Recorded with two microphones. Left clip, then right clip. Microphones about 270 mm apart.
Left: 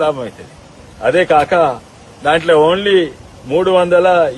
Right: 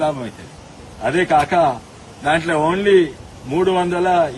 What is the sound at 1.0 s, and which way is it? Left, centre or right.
A man's voice, left.